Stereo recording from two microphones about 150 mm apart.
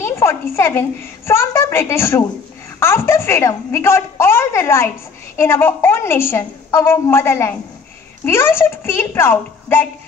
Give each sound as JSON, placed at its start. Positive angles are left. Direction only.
{"t": 0.0, "sound": "a woman's voice", "side_deg": 15}